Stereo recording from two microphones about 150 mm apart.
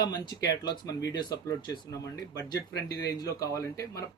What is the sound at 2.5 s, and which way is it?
Speech, 90° left.